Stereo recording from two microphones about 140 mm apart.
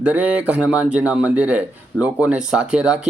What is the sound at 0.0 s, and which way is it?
Speech, 10° right (ahead or behind).